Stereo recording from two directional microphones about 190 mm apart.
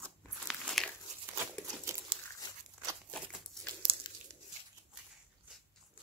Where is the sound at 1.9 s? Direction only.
15° right (ahead or behind).